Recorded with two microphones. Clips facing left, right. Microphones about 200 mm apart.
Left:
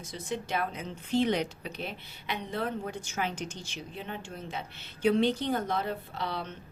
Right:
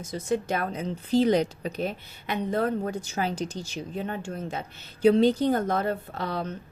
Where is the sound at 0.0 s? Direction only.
45° right (ahead or behind).